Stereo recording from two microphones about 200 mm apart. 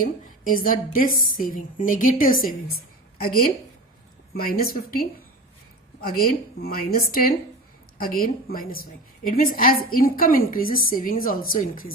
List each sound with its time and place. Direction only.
0.0 s a woman's voice: 45° left (ahead or behind)